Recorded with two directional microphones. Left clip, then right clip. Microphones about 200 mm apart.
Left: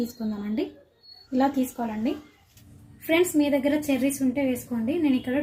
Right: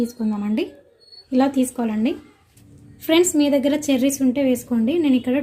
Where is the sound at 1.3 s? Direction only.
40° right (ahead or behind).